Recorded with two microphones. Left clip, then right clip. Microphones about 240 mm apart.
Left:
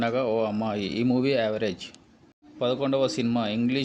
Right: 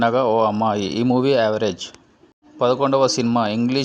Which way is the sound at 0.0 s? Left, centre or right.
Centre.